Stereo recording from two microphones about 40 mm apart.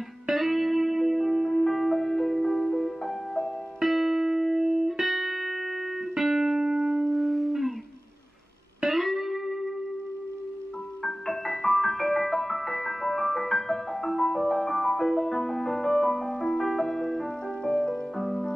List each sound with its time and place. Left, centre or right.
0.3 s music: centre
3.8 s music: centre
8.8 s music: centre
11.1 s music: centre
16.3 s music: centre
16.6 s music: centre
17.6 s music: left
18.1 s music: centre